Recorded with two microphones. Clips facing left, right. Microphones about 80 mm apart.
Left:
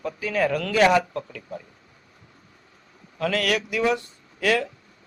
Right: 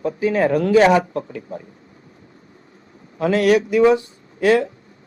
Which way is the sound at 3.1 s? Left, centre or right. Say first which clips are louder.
Right 8 dB; right.